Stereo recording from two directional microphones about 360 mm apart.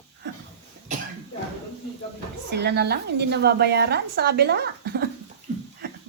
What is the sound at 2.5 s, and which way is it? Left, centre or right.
A woman's voice, right.